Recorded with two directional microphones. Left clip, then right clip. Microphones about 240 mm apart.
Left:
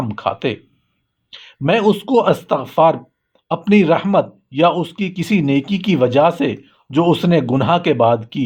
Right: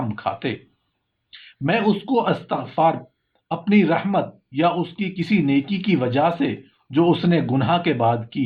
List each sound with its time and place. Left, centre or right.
0.1 s speech: left